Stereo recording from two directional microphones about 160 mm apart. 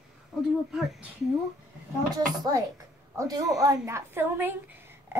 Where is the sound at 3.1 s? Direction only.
20° right (ahead or behind).